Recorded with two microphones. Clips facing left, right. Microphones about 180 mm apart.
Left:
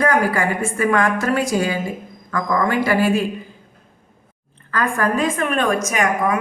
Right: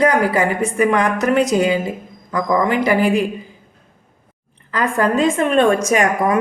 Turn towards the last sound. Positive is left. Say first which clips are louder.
# right 3 dB
turn(degrees=-35)  # may be behind; listen again after turning